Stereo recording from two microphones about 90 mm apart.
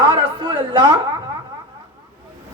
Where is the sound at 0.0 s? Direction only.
60° right (ahead or behind).